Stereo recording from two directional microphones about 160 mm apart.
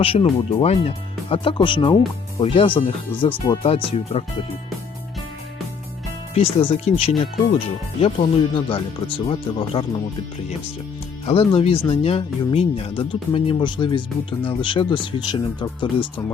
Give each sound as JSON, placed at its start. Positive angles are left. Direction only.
{"t": 0.0, "sound": "speech", "side_deg": 35}
{"t": 6.3, "sound": "speech", "side_deg": 40}
{"t": 11.3, "sound": "speech", "side_deg": 40}